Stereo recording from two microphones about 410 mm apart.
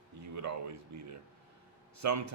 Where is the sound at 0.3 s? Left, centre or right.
Right.